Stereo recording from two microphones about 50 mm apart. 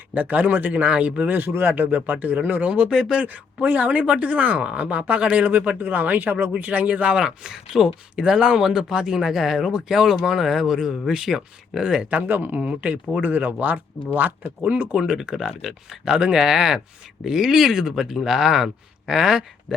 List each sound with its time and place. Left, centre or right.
0.1 s speech: right
1.4 s speech: right
1.6 s speech: right; by 3.2 s centre
3.2 s speech: right
7.2 s speech: centre
12.1 s speech: right
12.5 s speech: centre
13.2 s speech: right
14.9 s speech: centre